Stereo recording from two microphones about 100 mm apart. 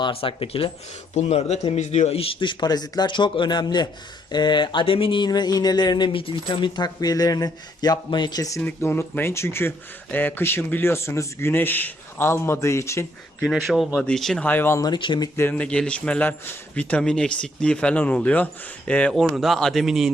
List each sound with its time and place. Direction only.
0.0 s speech: 65° left (ahead or behind)
1.3 s speech: 90° left; by 8.6 s 35° left (ahead or behind)
8.8 s speech: 25° left (ahead or behind)
13.4 s speech: centre (ahead or behind)
14.4 s speech: 20° left (ahead or behind)
14.8 s speech: 50° left (ahead or behind)
15.4 s a man's voice: 20° left (ahead or behind)
19.1 s speech: centre (ahead or behind)